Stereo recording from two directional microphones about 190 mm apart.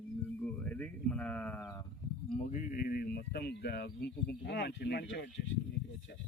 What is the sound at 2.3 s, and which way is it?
Speech, 45° left (ahead or behind).